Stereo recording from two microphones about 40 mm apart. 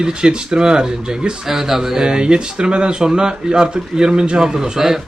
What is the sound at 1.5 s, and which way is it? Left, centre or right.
Speech, centre.